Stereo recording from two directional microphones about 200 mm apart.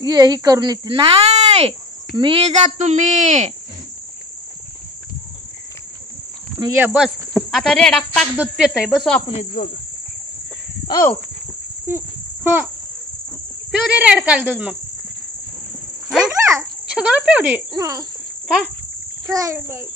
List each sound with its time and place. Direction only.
0.0 s speech: 20° right (ahead or behind); by 3.4 s 35° right (ahead or behind)
6.6 s a child's voice: 10° right (ahead or behind)
7.0 s speech: centre (ahead or behind)
9.3 s insect: 35° left (ahead or behind)
10.9 s speech: 15° left (ahead or behind)
11.9 s a child's voice: 10° right (ahead or behind)
13.7 s speech: 5° right (ahead or behind)
16.1 s dog: 5° right (ahead or behind)
16.9 s speech: 5° right (ahead or behind)
17.7 s a child's voice: 20° right (ahead or behind)
19.2 s a child's voice: 15° right (ahead or behind)